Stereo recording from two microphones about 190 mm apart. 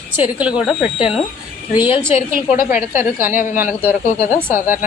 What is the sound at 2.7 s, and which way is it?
Speech, 40° left (ahead or behind).